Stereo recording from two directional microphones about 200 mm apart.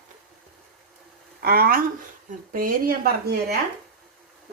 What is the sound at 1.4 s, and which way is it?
A woman's voice, 50° right (ahead or behind).